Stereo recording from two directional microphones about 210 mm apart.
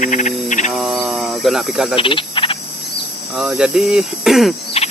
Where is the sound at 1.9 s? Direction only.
25° left (ahead or behind).